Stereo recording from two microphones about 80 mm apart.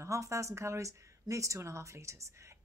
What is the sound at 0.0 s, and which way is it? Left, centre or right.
Speech, right.